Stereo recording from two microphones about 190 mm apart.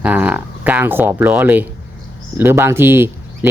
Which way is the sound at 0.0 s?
10° right (ahead or behind).